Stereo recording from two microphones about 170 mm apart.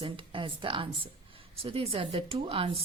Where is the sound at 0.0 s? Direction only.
30° right (ahead or behind).